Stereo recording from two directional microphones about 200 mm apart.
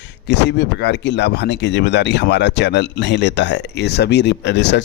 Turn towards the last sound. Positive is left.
turn(degrees=60)  # may be behind; listen again after turning